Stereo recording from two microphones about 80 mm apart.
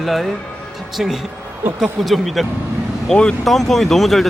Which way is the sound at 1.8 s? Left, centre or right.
Centre.